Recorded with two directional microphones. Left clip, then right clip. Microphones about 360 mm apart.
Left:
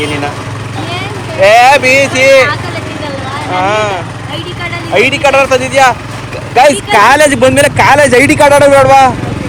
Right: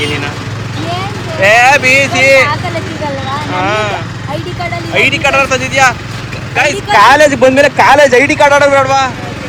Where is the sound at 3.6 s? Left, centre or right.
Centre.